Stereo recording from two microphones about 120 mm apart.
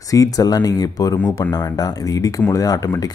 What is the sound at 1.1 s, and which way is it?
Speech, 20° left (ahead or behind).